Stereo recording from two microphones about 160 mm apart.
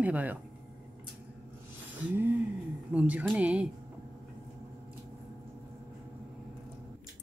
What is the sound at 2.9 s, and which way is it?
Speech, 10° right (ahead or behind).